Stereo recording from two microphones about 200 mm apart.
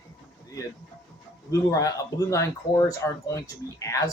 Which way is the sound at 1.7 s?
15° left (ahead or behind).